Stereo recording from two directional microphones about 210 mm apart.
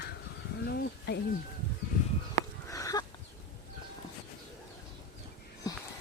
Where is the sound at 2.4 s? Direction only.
15° left (ahead or behind).